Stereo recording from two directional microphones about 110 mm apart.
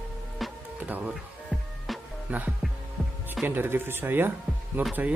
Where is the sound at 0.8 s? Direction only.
15° right (ahead or behind).